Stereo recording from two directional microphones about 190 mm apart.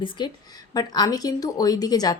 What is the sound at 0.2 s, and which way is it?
Speech, 25° left (ahead or behind).